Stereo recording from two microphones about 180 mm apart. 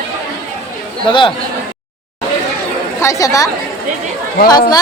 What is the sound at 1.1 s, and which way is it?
Speech, 25° left (ahead or behind).